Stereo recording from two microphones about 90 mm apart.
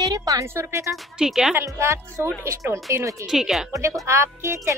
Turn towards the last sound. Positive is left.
turn(degrees=-30)  # may be behind; listen again after turning